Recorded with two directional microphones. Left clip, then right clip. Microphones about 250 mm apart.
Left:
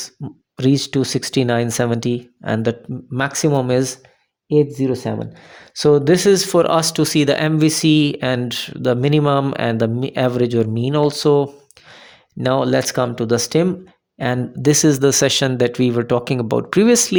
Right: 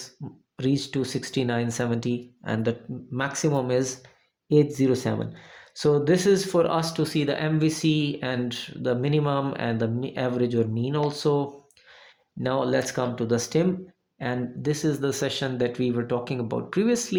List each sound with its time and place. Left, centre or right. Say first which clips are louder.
0.5 s speech: left 9 dB; left
4.5 s speech: left 5 dB; left
5.7 s speech: left 8 dB; left